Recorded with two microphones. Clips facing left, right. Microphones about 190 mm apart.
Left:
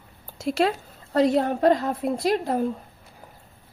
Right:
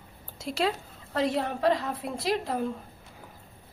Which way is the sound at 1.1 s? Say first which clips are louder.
Left 7 dB; 45° left (ahead or behind).